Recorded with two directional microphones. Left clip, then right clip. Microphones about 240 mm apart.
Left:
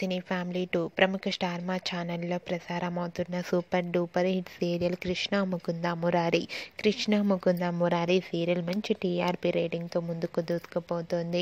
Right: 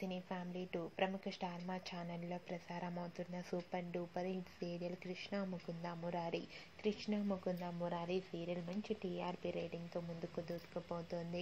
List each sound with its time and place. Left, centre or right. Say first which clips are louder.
0.0 s speech: left 14 dB; left